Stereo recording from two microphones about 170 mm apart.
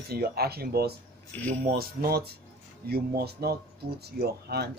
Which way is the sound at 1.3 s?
10° left (ahead or behind).